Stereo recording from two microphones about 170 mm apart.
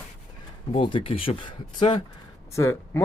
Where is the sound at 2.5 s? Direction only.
15° left (ahead or behind).